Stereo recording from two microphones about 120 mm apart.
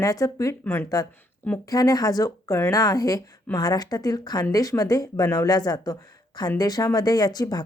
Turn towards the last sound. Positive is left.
turn(degrees=35)  # may be behind; listen again after turning